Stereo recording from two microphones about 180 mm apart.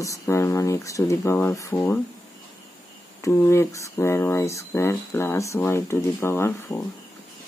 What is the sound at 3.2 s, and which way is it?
Speech, 15° left (ahead or behind).